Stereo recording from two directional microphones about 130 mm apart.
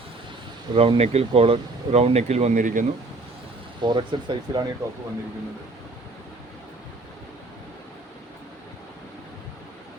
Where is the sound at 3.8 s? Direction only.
35° right (ahead or behind).